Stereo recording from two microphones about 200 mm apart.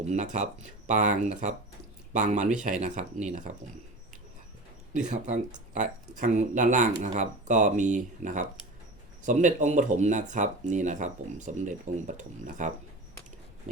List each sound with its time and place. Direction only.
0.0 s speech: 35° right (ahead or behind)
4.9 s speech: 35° right (ahead or behind)